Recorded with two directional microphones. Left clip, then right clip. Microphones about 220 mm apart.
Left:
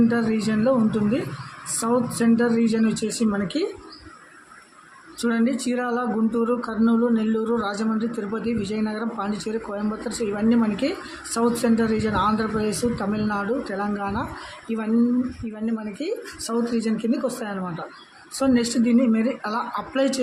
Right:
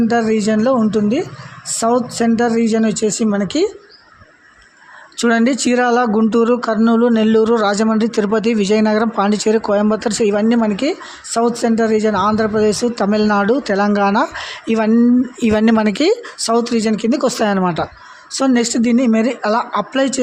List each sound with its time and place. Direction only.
0.1 s speech: 35° right (ahead or behind)
5.1 s speech: 40° right (ahead or behind)
15.4 s speech: 45° right (ahead or behind)